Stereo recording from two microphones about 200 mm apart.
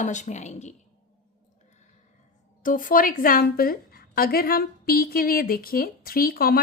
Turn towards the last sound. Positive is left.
turn(degrees=50)  # may be behind; listen again after turning